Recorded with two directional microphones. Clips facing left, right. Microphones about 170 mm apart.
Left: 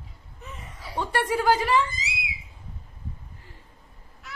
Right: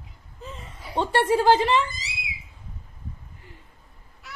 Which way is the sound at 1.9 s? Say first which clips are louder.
Left 2 dB; centre (ahead or behind).